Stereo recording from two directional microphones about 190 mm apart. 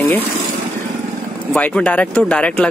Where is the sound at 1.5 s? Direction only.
5° left (ahead or behind).